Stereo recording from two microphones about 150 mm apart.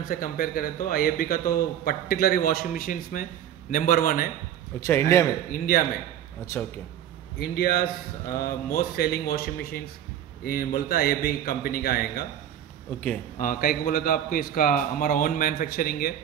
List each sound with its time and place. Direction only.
0.0 s a man's voice: 70° left (ahead or behind)
4.7 s a man's voice: 20° left (ahead or behind)
5.5 s a man's voice: 80° left
7.3 s a man's voice: 90° left
10.4 s a man's voice: 75° left (ahead or behind); by 12.3 s 90° left
13.4 s a man's voice: 70° left (ahead or behind)